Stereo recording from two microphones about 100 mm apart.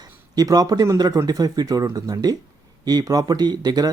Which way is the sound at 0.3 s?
40° right (ahead or behind).